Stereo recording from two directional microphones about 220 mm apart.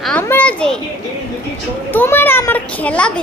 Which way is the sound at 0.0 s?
5° left (ahead or behind).